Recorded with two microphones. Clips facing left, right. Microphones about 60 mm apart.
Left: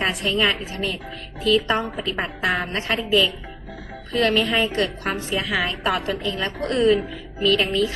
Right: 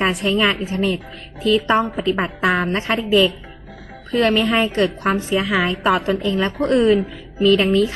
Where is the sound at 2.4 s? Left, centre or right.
Right.